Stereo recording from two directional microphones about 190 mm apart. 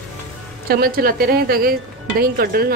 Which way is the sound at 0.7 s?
50° right (ahead or behind).